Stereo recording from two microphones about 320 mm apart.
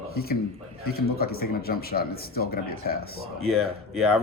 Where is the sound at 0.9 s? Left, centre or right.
Left.